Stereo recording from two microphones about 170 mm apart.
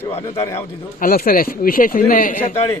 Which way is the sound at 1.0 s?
60° left (ahead or behind).